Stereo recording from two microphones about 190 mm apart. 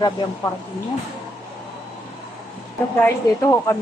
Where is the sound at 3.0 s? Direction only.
15° left (ahead or behind).